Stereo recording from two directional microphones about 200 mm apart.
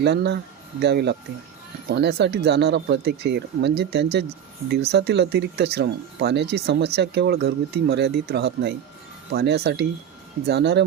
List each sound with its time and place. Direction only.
0.0 s speech: 60° right (ahead or behind)